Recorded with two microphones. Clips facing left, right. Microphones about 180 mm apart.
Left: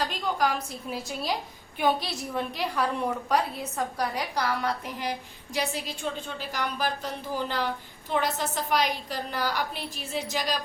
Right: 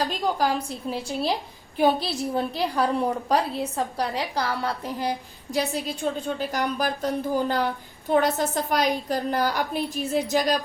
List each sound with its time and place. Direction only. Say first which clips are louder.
0.3 s a woman's voice: right 3 dB; 30° right (ahead or behind)
6.2 s a woman's voice: right 6 dB; 45° right (ahead or behind)